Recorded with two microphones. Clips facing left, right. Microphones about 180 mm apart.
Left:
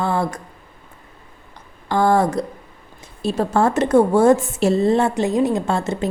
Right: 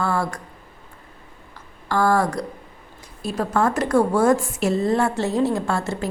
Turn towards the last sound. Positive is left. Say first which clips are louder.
# left 3 dB
turn(degrees=20)  # may be behind; listen again after turning